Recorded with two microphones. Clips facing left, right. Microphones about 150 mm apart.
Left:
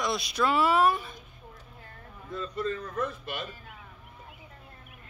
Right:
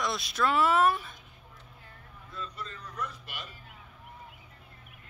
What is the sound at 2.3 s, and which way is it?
A man's voice, 50° left (ahead or behind).